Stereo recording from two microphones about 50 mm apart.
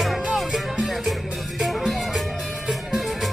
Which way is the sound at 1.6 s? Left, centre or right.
Centre.